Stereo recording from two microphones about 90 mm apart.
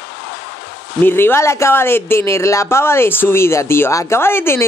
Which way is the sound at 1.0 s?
25° left (ahead or behind).